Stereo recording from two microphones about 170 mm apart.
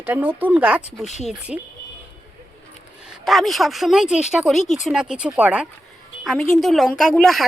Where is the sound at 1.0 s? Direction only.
40° left (ahead or behind).